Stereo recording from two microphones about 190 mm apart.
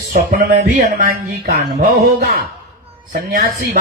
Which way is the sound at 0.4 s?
50° right (ahead or behind).